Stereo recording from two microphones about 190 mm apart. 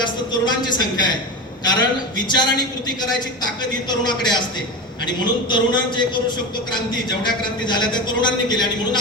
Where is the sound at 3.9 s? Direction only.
20° left (ahead or behind).